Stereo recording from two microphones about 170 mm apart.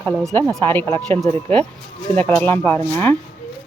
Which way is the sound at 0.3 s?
10° left (ahead or behind).